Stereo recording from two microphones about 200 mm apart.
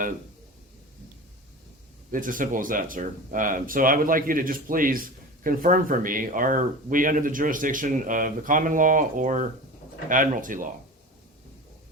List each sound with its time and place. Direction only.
2.1 s speech: 40° right (ahead or behind)